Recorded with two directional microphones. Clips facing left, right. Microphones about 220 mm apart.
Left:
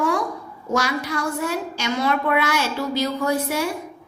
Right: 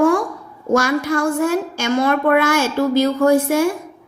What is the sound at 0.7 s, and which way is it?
A woman's voice, 50° right (ahead or behind).